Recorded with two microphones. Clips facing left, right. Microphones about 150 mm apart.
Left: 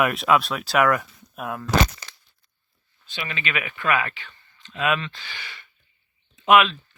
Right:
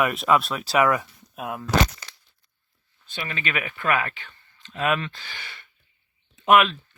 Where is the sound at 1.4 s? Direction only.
15° right (ahead or behind).